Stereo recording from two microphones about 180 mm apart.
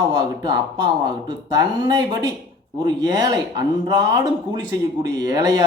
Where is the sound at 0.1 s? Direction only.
20° right (ahead or behind).